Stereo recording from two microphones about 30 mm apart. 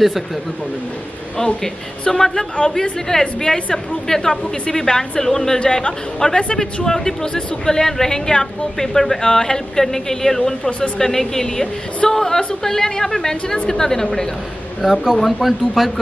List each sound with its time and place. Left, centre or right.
1.4 s a man's voice: centre
14.8 s speech: centre